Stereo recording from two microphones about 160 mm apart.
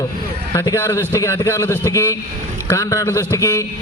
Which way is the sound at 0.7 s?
15° left (ahead or behind).